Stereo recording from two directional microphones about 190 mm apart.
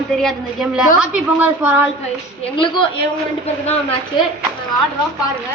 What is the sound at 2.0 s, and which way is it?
Speech, 30° left (ahead or behind).